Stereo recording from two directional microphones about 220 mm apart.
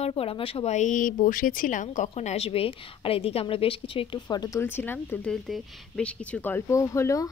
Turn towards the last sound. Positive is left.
turn(degrees=15)  # may be behind; listen again after turning